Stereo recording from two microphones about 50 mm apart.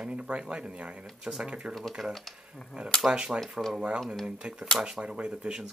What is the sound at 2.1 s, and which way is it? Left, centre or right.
Speech, centre.